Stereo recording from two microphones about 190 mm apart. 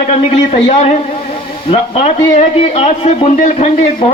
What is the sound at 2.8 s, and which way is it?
A man's voice, 35° left (ahead or behind).